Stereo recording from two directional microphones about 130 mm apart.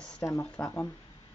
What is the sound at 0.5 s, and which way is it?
Speech, 10° left (ahead or behind).